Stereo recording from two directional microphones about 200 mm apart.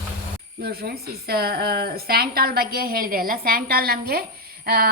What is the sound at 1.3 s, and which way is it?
A woman's voice, 50° right (ahead or behind).